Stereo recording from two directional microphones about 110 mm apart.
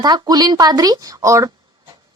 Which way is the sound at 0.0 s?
40° right (ahead or behind).